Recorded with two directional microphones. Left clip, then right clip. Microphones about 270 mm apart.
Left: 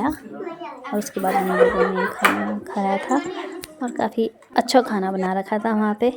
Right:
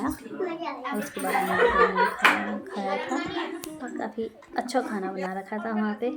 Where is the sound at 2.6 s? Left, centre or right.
Left.